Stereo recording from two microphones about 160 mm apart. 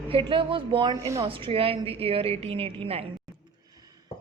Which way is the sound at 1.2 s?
35° right (ahead or behind).